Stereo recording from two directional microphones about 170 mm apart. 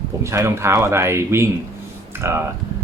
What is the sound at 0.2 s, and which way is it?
Speech, 15° right (ahead or behind).